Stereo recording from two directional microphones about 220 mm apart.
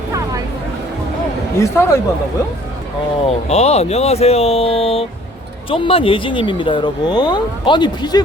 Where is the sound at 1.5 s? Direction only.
15° left (ahead or behind).